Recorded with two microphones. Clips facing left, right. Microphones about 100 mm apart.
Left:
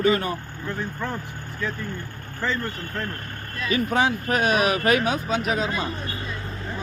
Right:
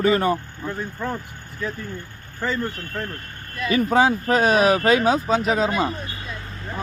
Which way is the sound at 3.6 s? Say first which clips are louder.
Right 4 dB; 35° right (ahead or behind).